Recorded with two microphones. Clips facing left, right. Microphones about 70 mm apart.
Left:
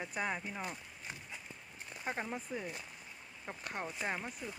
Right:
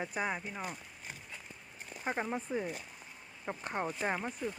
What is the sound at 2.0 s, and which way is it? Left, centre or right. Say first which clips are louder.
Speech: right 4 dB; right.